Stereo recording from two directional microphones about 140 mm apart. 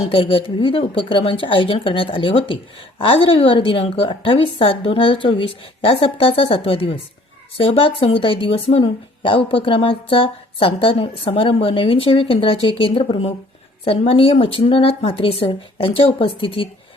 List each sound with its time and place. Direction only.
0.1 s speech: 40° left (ahead or behind)